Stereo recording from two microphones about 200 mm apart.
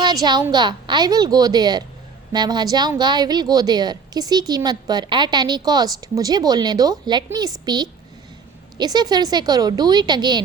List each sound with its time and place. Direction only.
0.0 s a woman's voice: 20° right (ahead or behind)